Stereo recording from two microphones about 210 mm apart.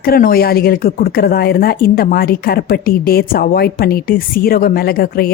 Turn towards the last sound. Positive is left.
turn(degrees=45)  # may be behind; listen again after turning